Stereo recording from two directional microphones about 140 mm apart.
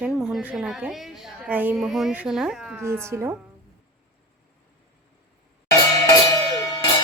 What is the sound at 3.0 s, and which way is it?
Speech, 20° right (ahead or behind).